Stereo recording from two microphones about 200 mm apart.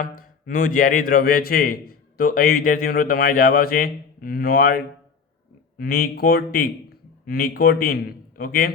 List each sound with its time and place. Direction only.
0.0 s a man's voice: 45° left (ahead or behind)